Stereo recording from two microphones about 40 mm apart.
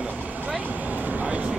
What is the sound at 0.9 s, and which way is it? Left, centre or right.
Vehicle, right.